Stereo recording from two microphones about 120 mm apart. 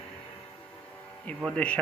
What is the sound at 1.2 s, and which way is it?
Speech, 5° left (ahead or behind).